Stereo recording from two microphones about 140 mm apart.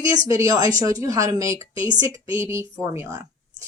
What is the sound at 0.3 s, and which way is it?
Speech, 25° right (ahead or behind).